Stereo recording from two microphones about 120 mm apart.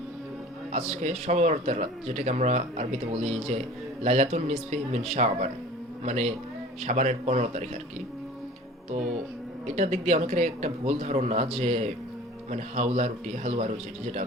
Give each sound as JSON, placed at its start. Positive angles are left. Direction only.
{"t": 0.7, "sound": "a man's voice", "side_deg": -70}
{"t": 9.6, "sound": "a man's voice", "side_deg": -65}